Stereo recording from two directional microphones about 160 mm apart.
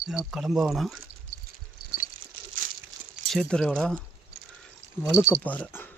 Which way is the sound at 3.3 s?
5° left (ahead or behind).